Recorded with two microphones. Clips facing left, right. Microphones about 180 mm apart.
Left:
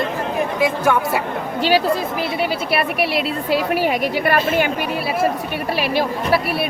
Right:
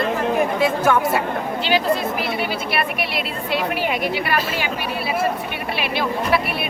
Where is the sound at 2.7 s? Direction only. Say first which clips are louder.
Left 4 dB; 35° left (ahead or behind); by 4.7 s 50° left (ahead or behind).